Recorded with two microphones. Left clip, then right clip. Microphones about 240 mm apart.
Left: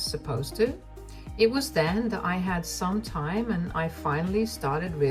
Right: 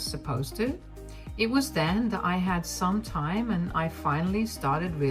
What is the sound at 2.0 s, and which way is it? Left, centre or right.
Speech, right.